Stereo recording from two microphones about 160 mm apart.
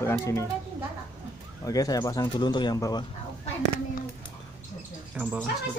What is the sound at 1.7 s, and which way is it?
Speech, 25° left (ahead or behind).